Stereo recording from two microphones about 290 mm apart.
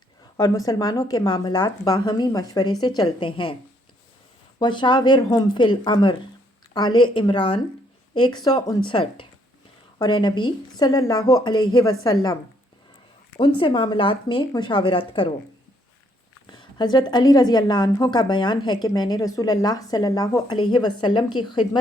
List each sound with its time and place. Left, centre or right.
0.3 s a woman's voice: centre
4.6 s a woman's voice: centre
13.6 s a woman's voice: centre
16.5 s a woman's voice: centre